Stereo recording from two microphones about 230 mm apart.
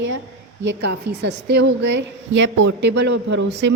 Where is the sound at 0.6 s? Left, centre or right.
Right.